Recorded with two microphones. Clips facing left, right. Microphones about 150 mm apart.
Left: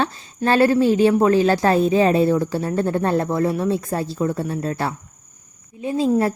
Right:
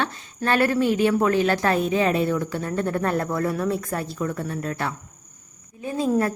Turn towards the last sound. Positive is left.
turn(degrees=25)  # may be behind; listen again after turning